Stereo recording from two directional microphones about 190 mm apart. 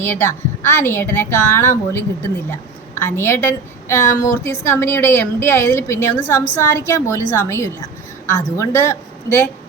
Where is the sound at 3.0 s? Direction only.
15° left (ahead or behind).